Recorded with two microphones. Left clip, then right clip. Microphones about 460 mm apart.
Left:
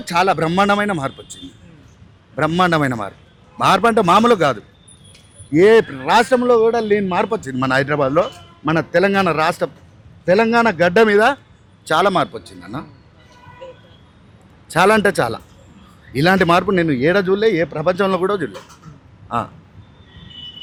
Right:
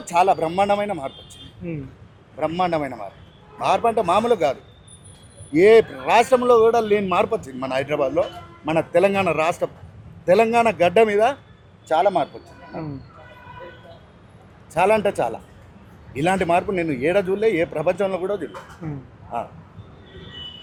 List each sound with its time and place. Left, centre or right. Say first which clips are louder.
0.1 s speech: left 2 dB; left
2.4 s a man's voice: left 6 dB; left
11.9 s speech: left 3 dB; left
14.7 s a man's voice: left 5 dB; left